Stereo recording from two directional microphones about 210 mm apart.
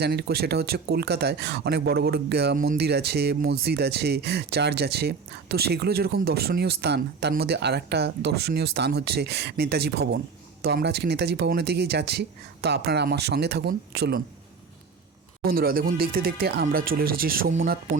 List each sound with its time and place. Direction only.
0.0 s speech: 50° right (ahead or behind)
15.4 s speech: 45° right (ahead or behind)